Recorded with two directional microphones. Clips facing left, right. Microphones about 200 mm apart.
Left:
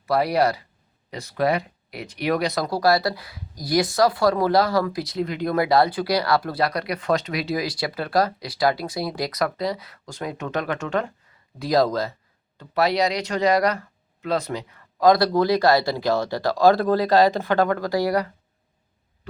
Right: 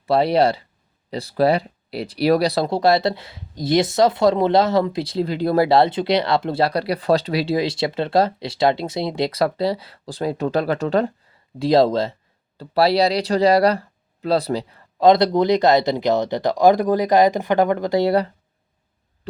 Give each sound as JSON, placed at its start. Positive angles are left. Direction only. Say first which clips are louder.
{"t": 0.0, "sound": "speech", "louder": "right 4 dB", "side_deg": -25}